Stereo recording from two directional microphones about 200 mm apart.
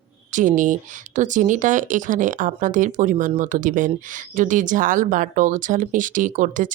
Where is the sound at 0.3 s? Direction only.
40° right (ahead or behind).